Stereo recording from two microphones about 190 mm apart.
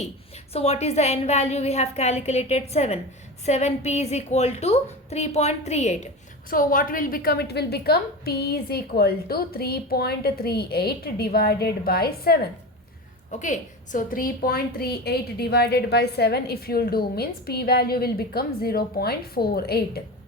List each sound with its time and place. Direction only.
0.5 s a woman's voice: 35° left (ahead or behind)
6.5 s a woman's voice: 45° left (ahead or behind)
13.3 s a woman's voice: 40° left (ahead or behind)